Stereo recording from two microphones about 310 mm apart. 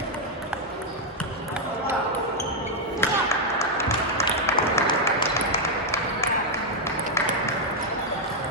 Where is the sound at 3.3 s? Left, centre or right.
Centre.